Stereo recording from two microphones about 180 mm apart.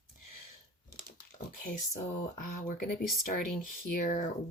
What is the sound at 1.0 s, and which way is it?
Speech, 45° left (ahead or behind).